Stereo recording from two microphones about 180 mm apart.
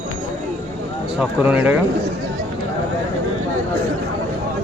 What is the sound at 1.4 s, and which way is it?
Speech, 10° right (ahead or behind).